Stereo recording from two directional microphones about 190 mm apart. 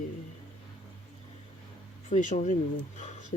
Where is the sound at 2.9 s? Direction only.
40° left (ahead or behind).